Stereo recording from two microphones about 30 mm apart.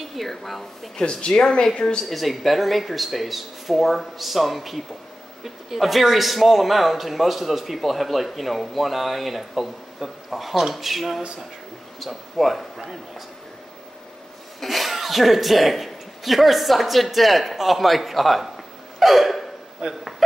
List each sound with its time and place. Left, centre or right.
0.0 s a sound: centre
0.3 s a man's voice: centre
1.0 s speech: centre
2.0 s a man's voice: centre
12.7 s a sound: centre
14.6 s a man's voice: centre
18.9 s hiccup: centre
19.9 s speech: centre